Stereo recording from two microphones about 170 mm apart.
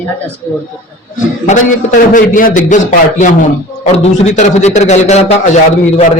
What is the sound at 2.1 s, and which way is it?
A man's voice, 50° left (ahead or behind).